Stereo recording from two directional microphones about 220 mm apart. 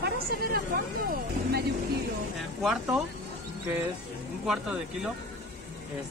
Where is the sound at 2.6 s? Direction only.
Centre (ahead or behind).